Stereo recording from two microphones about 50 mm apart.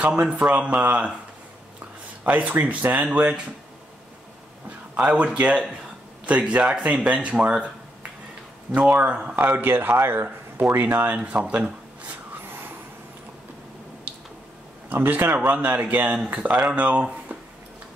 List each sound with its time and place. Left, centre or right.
0.0 s speech: right
2.2 s speech: right
4.6 s a man's voice: right
8.9 s speech: right
9.6 s speech: right
9.9 s speech: right
10.2 s speech: right
11.3 s speech: right
15.0 s speech: right